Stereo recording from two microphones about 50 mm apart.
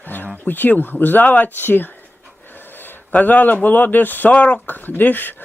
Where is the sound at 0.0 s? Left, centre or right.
Left.